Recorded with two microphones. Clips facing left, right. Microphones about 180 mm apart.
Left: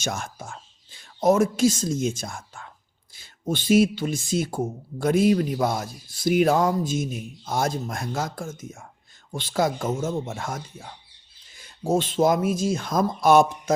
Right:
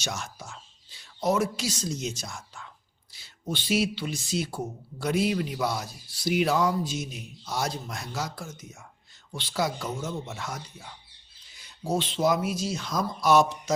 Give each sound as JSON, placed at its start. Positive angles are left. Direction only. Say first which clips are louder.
{"t": 0.0, "sound": "speech", "louder": "left 5 dB", "side_deg": 50}